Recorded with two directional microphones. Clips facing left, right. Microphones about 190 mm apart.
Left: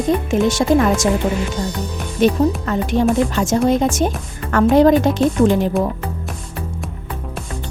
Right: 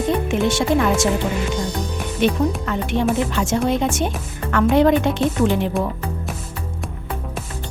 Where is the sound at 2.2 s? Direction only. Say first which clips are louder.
Left 4 dB; 40° left (ahead or behind).